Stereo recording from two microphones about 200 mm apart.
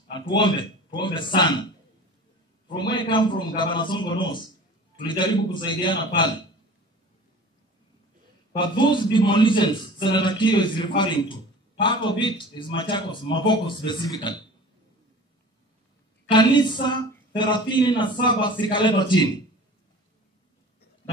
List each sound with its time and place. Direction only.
0.1 s speech: 25° left (ahead or behind)
2.7 s a man's voice: 25° left (ahead or behind)
8.5 s a man's voice: 25° left (ahead or behind)
16.3 s a man's voice: 20° left (ahead or behind)